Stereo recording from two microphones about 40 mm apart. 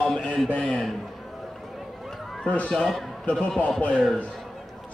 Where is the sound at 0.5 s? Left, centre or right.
Left.